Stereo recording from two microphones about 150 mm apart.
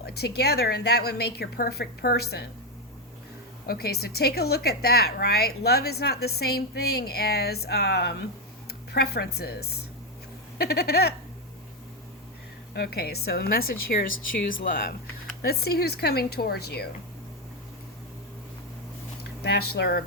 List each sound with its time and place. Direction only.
0.0 s a woman's voice: 90° left
3.7 s a woman's voice: 90° left
12.7 s a woman's voice: 90° left
15.4 s a woman's voice: 90° left
19.4 s a woman's voice: 90° left